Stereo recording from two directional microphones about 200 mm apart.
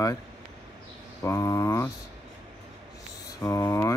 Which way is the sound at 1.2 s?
15° left (ahead or behind).